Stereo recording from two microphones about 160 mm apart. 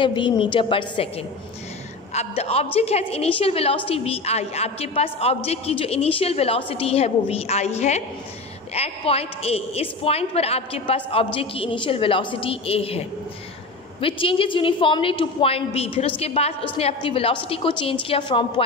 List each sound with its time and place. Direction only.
0.0 s a woman's voice: 30° left (ahead or behind)
14.0 s a woman's voice: 35° left (ahead or behind)